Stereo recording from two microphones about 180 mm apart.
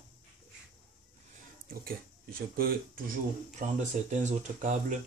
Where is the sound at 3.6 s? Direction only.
40° right (ahead or behind).